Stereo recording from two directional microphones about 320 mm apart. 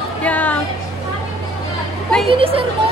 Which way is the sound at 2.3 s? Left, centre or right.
Centre.